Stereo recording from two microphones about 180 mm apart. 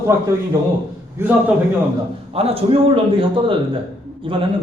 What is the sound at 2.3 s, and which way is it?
A man's voice, 35° right (ahead or behind).